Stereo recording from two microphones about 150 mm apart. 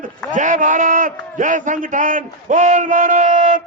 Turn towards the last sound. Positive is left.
turn(degrees=-60)  # may be behind; listen again after turning